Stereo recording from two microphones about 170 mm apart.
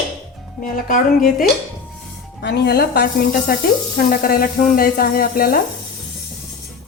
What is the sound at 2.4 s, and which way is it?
A woman's voice, 70° left (ahead or behind).